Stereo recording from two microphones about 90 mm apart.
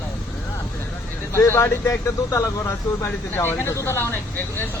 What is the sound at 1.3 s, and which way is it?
Speech, 30° left (ahead or behind).